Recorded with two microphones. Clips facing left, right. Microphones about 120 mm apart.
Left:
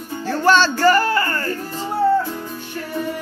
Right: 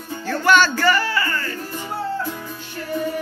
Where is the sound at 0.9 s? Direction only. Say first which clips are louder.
Left 4 dB; 45° left (ahead or behind).